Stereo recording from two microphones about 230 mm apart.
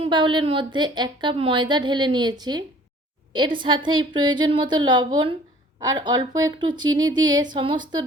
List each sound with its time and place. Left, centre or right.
0.0 s a woman's voice: centre